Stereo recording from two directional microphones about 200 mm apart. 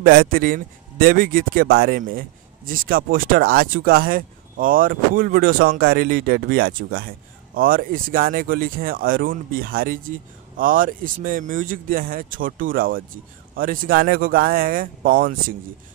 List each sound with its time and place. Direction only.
0.0 s a man's voice: 45° right (ahead or behind)